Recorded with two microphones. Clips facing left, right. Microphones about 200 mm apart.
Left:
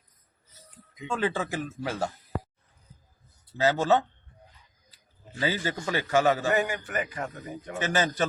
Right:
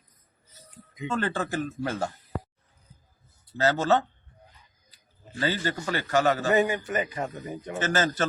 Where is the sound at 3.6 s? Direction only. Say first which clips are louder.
Even; 15° left (ahead or behind).